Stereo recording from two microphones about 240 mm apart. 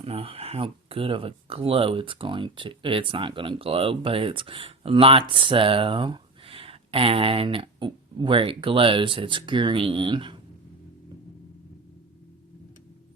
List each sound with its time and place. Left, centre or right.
0.0 s speech: right